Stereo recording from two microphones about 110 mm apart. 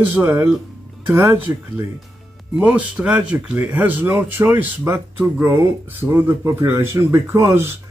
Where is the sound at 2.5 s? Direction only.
10° right (ahead or behind).